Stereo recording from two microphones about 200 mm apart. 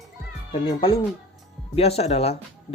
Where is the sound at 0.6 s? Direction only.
25° left (ahead or behind).